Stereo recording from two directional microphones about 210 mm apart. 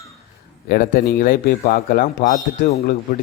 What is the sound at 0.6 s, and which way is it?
A man's voice, 45° left (ahead or behind).